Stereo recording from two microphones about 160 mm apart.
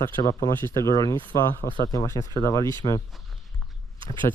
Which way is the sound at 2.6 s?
25° right (ahead or behind).